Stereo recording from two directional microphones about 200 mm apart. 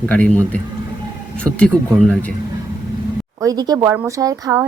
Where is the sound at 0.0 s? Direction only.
5° left (ahead or behind).